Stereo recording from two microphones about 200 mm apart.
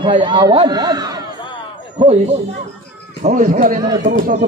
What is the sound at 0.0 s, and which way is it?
A man's voice, 25° right (ahead or behind).